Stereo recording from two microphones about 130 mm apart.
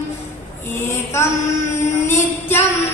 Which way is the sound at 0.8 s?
20° left (ahead or behind).